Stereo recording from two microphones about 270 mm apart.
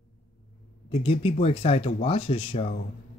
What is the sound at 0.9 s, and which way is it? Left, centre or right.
Speech, left.